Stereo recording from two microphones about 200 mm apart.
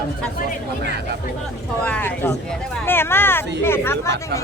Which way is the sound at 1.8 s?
10° left (ahead or behind).